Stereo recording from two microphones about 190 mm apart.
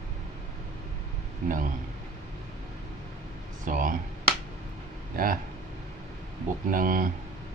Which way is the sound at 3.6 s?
45° right (ahead or behind).